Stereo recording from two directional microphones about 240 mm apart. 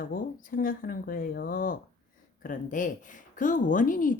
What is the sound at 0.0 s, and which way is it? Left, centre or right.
A woman's voice, left.